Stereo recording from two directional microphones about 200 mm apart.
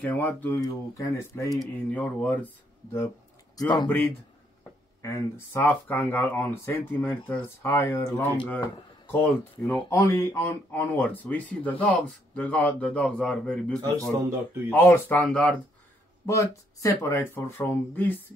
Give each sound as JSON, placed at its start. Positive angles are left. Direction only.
{"t": 0.0, "sound": "speech", "side_deg": 10}
{"t": 3.5, "sound": "speech", "side_deg": 20}
{"t": 5.0, "sound": "a man's voice", "side_deg": 15}